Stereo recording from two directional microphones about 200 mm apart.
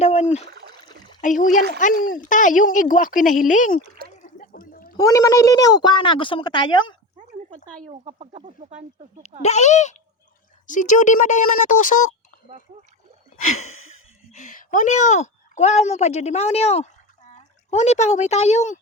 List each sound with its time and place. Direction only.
0.0 s speech: 35° left (ahead or behind)
4.2 s a sound: 45° left (ahead or behind)
4.9 s speech: 15° left (ahead or behind)
7.9 s speech: 30° right (ahead or behind)
9.4 s speech: 35° left (ahead or behind)
13.9 s speech: 40° left (ahead or behind)